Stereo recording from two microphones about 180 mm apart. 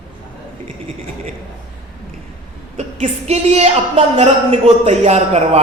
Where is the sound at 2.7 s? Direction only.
35° right (ahead or behind).